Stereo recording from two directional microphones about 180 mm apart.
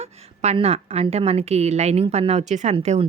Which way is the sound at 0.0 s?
35° right (ahead or behind).